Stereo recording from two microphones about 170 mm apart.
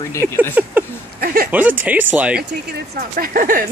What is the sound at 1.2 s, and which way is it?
Speech, 60° right (ahead or behind).